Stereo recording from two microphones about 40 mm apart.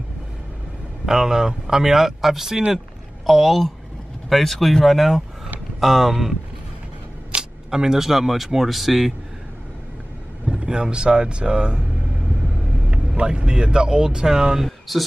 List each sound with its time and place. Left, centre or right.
1.0 s speech: centre
7.7 s speech: centre
10.6 s speech: right
12.9 s speech: right; by 15.0 s centre